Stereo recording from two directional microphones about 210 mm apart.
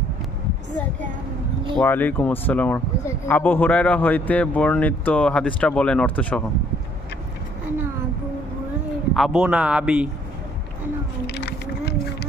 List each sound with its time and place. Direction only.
1.8 s speech: 10° left (ahead or behind)
9.1 s speech: centre (ahead or behind)
11.2 s vehicle: 55° left (ahead or behind)